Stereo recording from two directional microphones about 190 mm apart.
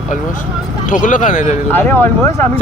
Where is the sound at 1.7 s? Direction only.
10° left (ahead or behind).